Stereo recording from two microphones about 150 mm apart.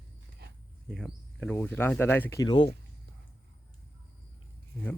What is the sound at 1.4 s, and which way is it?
Speech, 10° left (ahead or behind).